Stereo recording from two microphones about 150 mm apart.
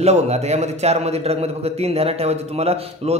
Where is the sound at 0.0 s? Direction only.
45° right (ahead or behind).